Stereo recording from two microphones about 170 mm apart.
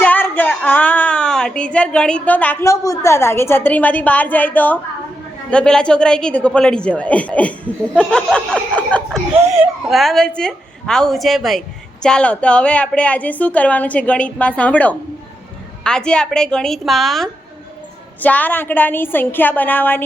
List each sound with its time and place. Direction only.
0.0 s a woman's voice: 10° left (ahead or behind)
9.4 s a child's voice: 15° right (ahead or behind)
9.9 s a woman's voice: centre (ahead or behind)